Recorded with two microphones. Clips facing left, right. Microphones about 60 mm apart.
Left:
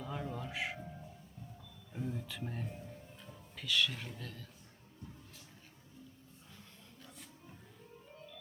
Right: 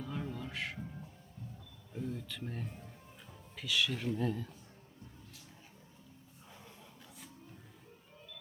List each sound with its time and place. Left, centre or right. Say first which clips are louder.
0.0 s music: even; centre
1.9 s speech: even; centre
4.2 s a man's voice: right 13 dB; centre